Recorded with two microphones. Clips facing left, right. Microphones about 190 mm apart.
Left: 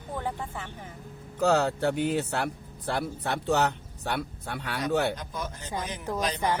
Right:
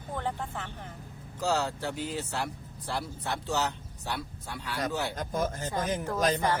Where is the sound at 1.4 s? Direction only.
60° left (ahead or behind).